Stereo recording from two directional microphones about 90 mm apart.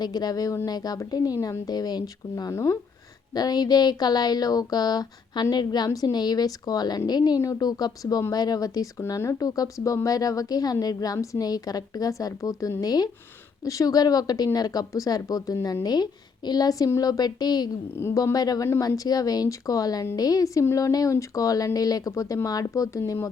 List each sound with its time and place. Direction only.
0.0 s speech: 50° left (ahead or behind)
2.5 s speech: 35° left (ahead or behind)
3.3 s speech: 50° left (ahead or behind)
17.9 s speech: 30° left (ahead or behind)
18.2 s speech: 45° left (ahead or behind)